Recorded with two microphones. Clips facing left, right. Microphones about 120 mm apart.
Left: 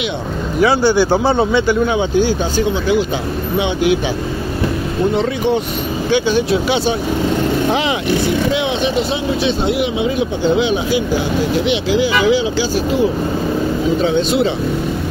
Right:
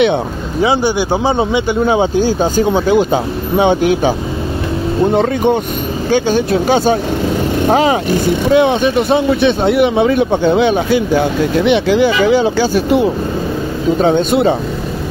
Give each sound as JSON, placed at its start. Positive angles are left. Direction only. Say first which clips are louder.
{"t": 0.6, "sound": "speech", "louder": "left 1 dB", "side_deg": -20}
{"t": 1.9, "sound": "speech", "louder": "right 3 dB", "side_deg": -40}
{"t": 5.1, "sound": "speech", "louder": "right 4 dB", "side_deg": -50}